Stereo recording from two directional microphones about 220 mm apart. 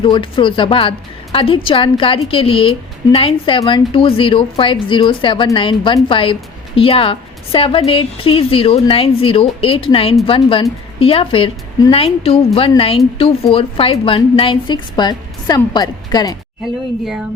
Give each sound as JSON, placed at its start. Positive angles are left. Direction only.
{"t": 0.0, "sound": "a woman's voice", "side_deg": 20}